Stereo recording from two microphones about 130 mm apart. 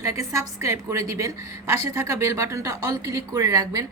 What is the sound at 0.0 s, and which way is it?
A woman's voice, 25° right (ahead or behind).